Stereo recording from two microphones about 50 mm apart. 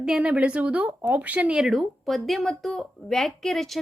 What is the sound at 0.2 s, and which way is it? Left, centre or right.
Speech, right.